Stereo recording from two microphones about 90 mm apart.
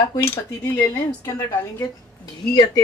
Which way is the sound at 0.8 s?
25° left (ahead or behind).